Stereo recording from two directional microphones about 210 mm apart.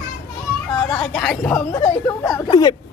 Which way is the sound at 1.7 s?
15° left (ahead or behind).